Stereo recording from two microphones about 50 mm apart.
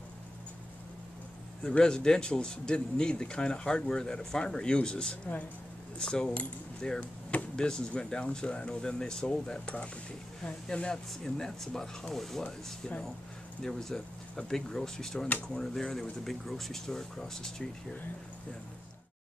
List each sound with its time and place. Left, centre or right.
1.6 s speech: centre
7.0 s speech: left
7.5 s speech: centre
13.6 s speech: centre